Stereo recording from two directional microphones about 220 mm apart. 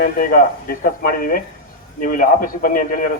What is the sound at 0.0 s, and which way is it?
Speech, 40° left (ahead or behind).